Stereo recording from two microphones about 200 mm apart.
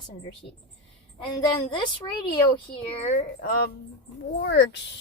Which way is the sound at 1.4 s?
25° left (ahead or behind).